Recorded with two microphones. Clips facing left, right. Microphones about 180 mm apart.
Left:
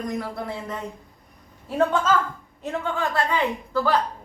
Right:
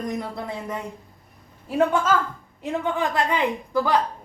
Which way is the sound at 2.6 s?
15° right (ahead or behind).